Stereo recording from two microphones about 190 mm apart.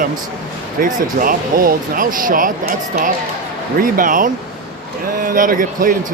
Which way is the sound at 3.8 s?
45° right (ahead or behind).